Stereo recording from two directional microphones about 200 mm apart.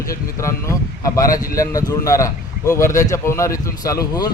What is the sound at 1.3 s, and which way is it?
Speech, 45° left (ahead or behind).